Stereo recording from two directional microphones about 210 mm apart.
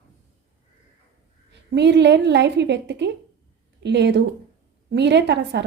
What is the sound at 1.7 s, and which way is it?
A woman's voice, 55° right (ahead or behind).